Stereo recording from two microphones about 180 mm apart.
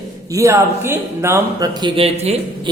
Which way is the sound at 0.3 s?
15° right (ahead or behind).